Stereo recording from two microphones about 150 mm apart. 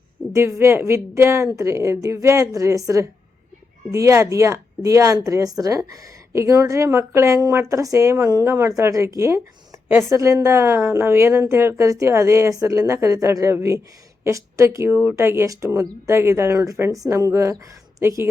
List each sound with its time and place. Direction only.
0.3 s a woman's voice: 20° right (ahead or behind)